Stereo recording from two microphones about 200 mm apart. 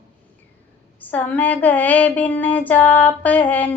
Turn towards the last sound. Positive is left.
turn(degrees=5)  # may be behind; listen again after turning